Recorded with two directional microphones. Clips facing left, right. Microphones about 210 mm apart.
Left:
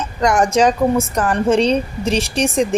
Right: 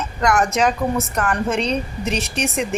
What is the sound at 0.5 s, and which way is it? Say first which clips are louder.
A woman's voice: left 5 dB; 30° left (ahead or behind).